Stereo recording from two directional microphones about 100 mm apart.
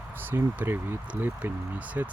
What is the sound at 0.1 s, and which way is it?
Speech, 20° right (ahead or behind).